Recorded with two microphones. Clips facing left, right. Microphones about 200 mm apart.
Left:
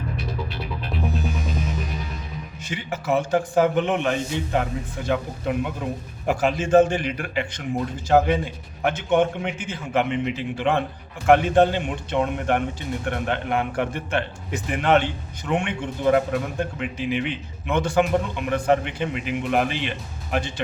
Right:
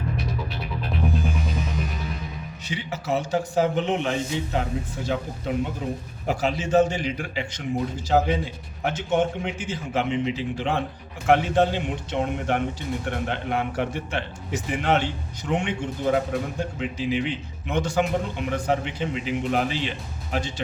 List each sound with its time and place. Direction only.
2.6 s a man's voice: 50° left (ahead or behind)